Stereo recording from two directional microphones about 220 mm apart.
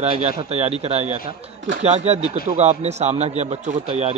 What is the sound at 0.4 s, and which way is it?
A man's voice, 30° right (ahead or behind).